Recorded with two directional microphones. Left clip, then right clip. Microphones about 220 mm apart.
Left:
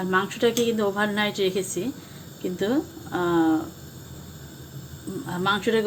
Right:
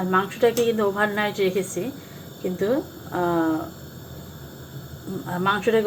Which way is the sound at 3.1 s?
35° left (ahead or behind).